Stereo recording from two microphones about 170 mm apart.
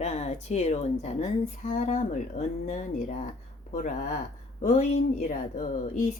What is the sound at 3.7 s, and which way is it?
Speech, 45° left (ahead or behind).